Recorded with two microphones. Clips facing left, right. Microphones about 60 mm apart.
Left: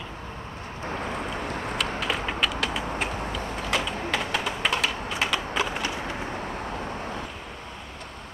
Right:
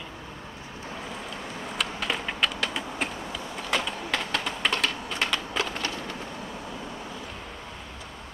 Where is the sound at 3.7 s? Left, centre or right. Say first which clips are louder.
Even; centre.